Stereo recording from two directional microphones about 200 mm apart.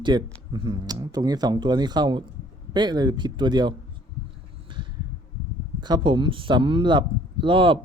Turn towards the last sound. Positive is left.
turn(degrees=-25)  # may be behind; listen again after turning